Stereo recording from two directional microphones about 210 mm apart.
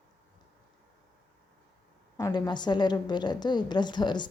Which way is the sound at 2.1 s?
20° left (ahead or behind).